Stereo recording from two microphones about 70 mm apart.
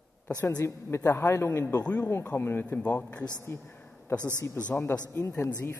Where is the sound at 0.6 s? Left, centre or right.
Left; by 3.3 s centre.